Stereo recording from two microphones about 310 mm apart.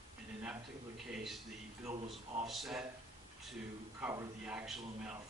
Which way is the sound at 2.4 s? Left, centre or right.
Centre.